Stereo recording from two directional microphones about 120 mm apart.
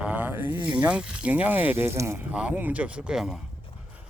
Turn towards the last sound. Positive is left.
turn(degrees=-5)  # may be behind; listen again after turning